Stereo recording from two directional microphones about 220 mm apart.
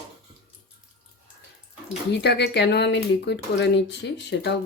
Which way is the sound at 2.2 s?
50° left (ahead or behind).